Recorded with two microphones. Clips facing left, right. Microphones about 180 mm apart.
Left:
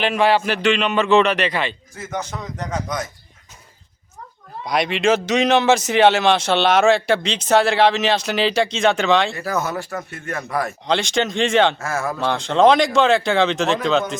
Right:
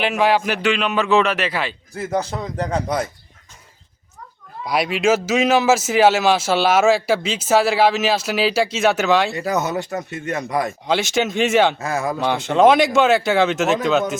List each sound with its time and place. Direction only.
0.0 s a man's voice: 10° right (ahead or behind)
1.9 s speech: 35° right (ahead or behind)
4.6 s a man's voice: 5° right (ahead or behind)
9.3 s speech: 20° right (ahead or behind)
10.8 s a man's voice: 5° right (ahead or behind)
11.8 s speech: 15° right (ahead or behind)
12.3 s a man's voice: 5° right (ahead or behind)